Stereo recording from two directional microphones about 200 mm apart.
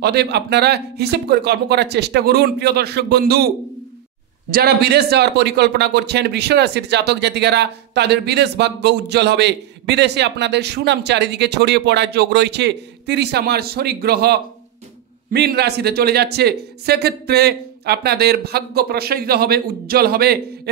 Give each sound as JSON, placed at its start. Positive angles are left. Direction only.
{"t": 0.0, "sound": "a man's voice", "side_deg": -55}
{"t": 4.5, "sound": "a man's voice", "side_deg": -50}